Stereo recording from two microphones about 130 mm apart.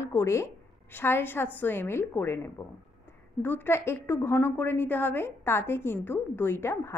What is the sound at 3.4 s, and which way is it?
Speech, 15° left (ahead or behind).